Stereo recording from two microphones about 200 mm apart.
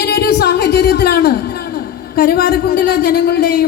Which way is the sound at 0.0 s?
50° left (ahead or behind).